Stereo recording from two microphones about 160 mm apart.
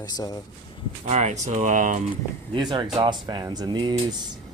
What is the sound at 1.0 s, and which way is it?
Speech, 45° right (ahead or behind).